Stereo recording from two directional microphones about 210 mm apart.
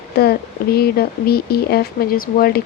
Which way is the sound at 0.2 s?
50° left (ahead or behind).